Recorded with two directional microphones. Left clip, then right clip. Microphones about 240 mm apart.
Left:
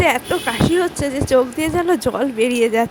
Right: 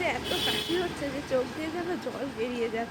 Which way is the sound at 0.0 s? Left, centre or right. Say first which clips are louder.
Left 12 dB; left.